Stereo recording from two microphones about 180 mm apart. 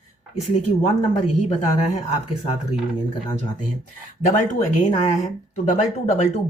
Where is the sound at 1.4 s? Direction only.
40° left (ahead or behind).